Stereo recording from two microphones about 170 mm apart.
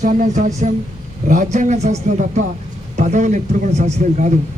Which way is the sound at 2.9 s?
45° right (ahead or behind).